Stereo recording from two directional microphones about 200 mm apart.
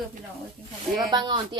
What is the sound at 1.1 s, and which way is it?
Speech, 20° right (ahead or behind).